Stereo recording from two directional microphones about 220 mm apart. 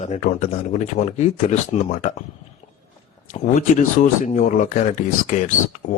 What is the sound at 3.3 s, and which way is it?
Speech, 35° left (ahead or behind).